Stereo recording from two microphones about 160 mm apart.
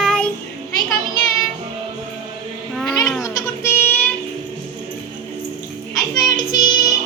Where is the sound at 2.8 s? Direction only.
Centre (ahead or behind).